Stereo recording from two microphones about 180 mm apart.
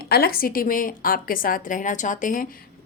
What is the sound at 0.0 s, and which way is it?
A woman's voice, 60° left (ahead or behind).